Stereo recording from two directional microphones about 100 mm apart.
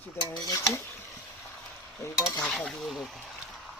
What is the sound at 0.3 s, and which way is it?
Speech, 30° left (ahead or behind).